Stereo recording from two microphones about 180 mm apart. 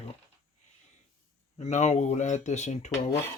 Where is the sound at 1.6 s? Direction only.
40° left (ahead or behind).